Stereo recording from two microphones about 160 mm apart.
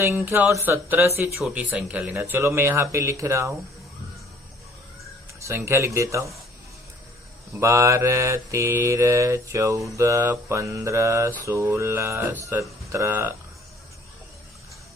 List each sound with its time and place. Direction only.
0.3 s mantra: 15° right (ahead or behind)
1.4 s speech: 5° right (ahead or behind)
2.1 s mantra: 15° right (ahead or behind)
5.4 s mantra: 15° right (ahead or behind)
7.6 s mantra: 20° right (ahead or behind)